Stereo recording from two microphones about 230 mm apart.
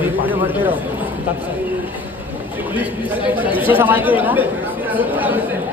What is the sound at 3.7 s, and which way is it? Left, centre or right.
Speech, centre.